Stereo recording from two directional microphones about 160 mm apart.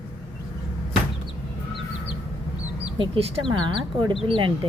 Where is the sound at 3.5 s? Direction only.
30° right (ahead or behind).